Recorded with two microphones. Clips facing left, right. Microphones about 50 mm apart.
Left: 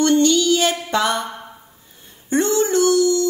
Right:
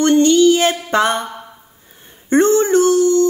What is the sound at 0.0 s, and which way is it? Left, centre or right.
Music, right.